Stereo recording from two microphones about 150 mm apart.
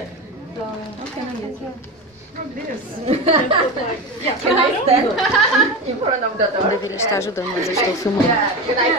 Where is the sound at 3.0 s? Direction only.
45° right (ahead or behind).